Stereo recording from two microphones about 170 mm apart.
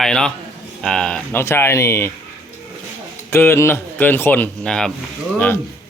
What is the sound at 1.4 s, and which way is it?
Speech, 15° left (ahead or behind).